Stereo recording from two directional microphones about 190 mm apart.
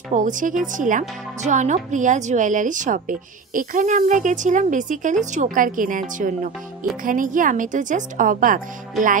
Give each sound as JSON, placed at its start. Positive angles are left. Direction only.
{"t": 0.1, "sound": "a woman's voice", "side_deg": -45}